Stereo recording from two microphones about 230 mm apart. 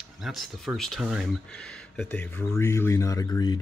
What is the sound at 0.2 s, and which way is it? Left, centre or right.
Speech, centre.